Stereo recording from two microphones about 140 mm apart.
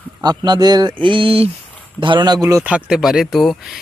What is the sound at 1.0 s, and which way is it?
Speech, 40° right (ahead or behind).